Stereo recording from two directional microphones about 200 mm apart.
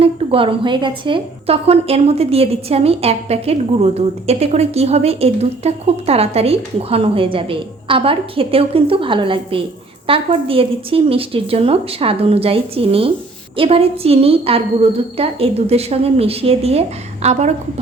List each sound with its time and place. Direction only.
0.0 s a woman's voice: 25° right (ahead or behind)